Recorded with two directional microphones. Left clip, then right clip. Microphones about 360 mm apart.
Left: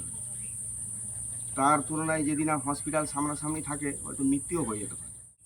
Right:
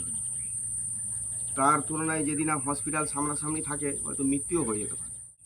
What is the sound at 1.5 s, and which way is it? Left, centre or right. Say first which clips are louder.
Speech: even; centre.